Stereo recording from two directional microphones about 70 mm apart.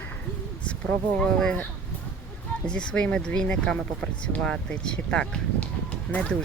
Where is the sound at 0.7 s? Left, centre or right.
Centre.